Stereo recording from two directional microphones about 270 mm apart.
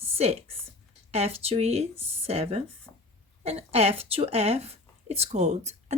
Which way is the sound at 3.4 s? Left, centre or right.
Right.